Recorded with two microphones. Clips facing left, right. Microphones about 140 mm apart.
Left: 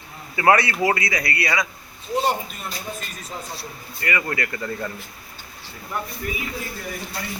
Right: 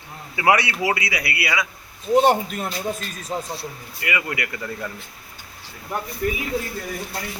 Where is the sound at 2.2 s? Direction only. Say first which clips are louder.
Right 5 dB; 75° right (ahead or behind).